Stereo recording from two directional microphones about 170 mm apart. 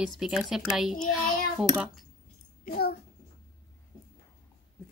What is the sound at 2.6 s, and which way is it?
Speech, 65° left (ahead or behind).